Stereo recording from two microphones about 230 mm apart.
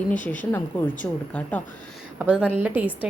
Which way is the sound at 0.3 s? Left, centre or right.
Centre.